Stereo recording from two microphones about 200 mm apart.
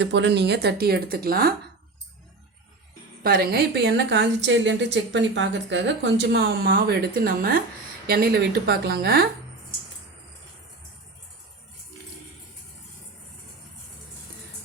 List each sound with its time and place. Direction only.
0.0 s speech: 65° right (ahead or behind); by 1.5 s 50° right (ahead or behind)
3.2 s a woman's voice: 50° right (ahead or behind)